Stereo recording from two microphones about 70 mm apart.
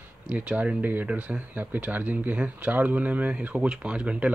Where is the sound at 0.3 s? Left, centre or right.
Centre.